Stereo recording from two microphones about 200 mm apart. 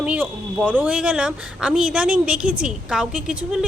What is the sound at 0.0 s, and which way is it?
A woman's voice, 5° right (ahead or behind).